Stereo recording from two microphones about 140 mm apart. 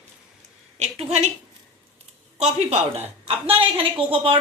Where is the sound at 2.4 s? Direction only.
50° right (ahead or behind).